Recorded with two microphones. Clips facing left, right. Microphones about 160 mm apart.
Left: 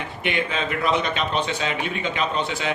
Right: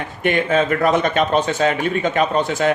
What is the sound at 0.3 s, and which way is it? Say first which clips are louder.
Speech: right 9 dB; 45° right (ahead or behind).